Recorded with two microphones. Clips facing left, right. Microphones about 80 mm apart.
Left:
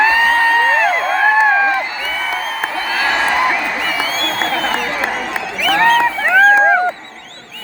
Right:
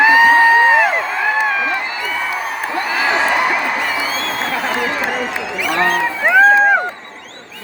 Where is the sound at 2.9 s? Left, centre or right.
Centre.